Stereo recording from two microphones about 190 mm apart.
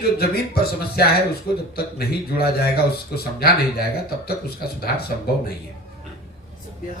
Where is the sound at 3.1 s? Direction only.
55° left (ahead or behind).